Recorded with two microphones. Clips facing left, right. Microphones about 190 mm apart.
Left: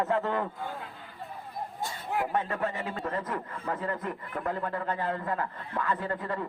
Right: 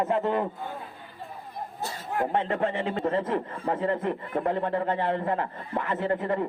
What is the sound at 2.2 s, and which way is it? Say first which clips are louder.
A man's voice: right 6 dB; 30° right (ahead or behind).